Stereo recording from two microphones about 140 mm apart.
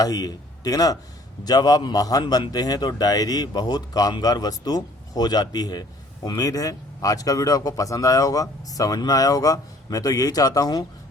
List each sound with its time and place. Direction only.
0.0 s a man's voice: 25° left (ahead or behind)